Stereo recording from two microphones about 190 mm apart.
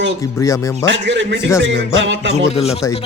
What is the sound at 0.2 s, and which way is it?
Speech, 15° left (ahead or behind).